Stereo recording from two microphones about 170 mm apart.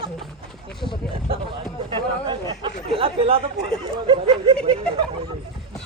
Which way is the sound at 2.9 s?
35° right (ahead or behind).